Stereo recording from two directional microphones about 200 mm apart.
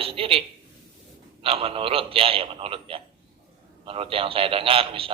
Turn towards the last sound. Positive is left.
turn(degrees=-25)  # may be behind; listen again after turning